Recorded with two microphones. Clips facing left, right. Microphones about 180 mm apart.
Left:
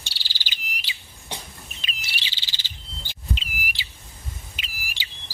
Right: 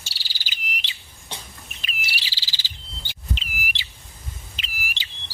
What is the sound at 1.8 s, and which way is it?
Bird, 20° left (ahead or behind).